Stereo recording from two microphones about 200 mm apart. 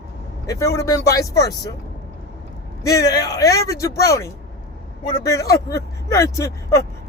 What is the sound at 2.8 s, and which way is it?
Speech, 15° left (ahead or behind).